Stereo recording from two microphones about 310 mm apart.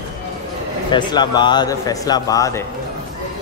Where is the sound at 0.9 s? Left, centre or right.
Centre.